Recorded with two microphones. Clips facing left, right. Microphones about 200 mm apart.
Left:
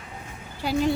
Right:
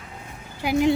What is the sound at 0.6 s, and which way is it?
Speech, 15° right (ahead or behind).